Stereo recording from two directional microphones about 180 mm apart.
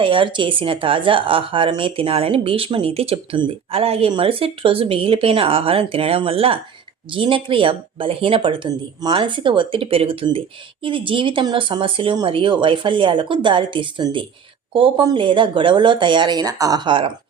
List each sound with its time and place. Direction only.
0.0 s a woman's voice: 30° right (ahead or behind)